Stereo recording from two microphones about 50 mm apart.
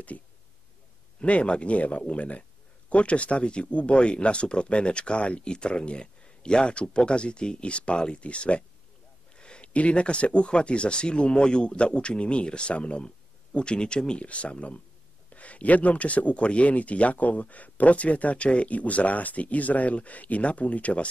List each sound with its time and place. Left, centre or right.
1.2 s speech: left